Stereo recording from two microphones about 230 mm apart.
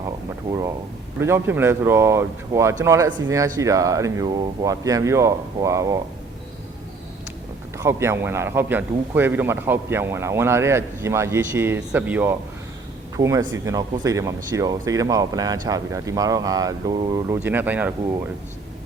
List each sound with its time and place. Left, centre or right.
1.2 s speech: centre
7.8 s speech: centre